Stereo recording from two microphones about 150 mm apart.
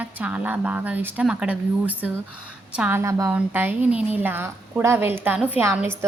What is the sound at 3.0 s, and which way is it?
A woman's voice, 20° right (ahead or behind).